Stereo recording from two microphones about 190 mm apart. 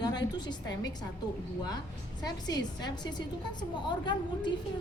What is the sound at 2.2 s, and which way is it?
A woman's voice, 20° left (ahead or behind).